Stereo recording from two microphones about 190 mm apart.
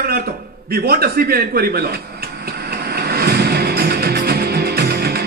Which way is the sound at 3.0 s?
55° right (ahead or behind).